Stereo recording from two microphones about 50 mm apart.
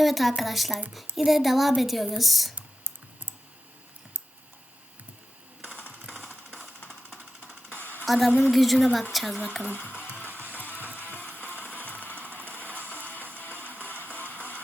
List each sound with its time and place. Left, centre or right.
0.0 s a woman's voice: centre
7.2 s music: right
8.0 s a woman's voice: centre
9.6 s speech: left
10.1 s music: right
11.3 s music: left
12.1 s a sound: right
12.6 s music: right
13.3 s music: left